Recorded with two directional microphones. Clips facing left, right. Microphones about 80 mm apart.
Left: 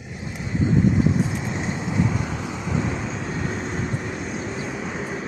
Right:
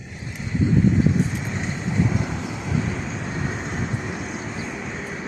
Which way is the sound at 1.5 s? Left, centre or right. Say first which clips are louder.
Left 1 dB; centre.